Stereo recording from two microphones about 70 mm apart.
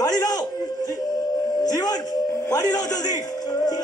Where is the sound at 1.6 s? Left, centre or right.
Left.